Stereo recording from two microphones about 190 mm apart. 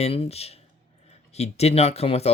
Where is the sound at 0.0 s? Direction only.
30° left (ahead or behind).